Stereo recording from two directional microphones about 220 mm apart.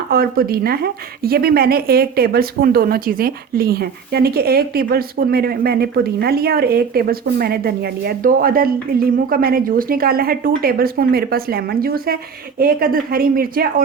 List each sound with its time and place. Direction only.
0.1 s speech: 40° right (ahead or behind)